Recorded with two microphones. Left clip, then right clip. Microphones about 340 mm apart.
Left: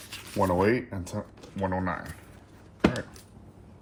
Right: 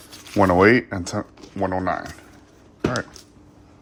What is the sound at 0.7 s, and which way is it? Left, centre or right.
Speech, right.